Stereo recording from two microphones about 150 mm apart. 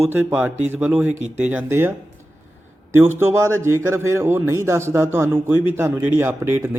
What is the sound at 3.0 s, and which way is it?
A man's voice, 15° right (ahead or behind).